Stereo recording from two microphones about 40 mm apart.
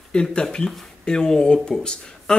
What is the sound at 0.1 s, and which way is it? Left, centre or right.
Speech, left.